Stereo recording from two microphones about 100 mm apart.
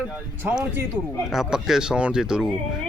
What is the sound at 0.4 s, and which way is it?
A man's voice, 15° right (ahead or behind).